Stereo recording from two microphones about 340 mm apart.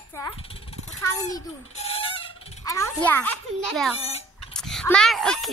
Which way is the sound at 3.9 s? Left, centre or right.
Centre.